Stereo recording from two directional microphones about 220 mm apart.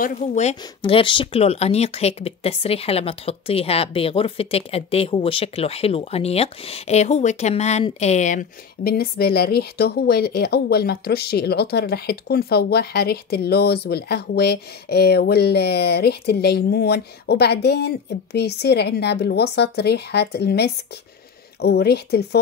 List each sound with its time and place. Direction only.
0.0 s speech: 35° left (ahead or behind)